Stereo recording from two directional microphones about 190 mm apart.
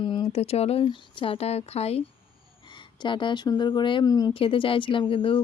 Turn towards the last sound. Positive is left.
turn(degrees=25)  # may be behind; listen again after turning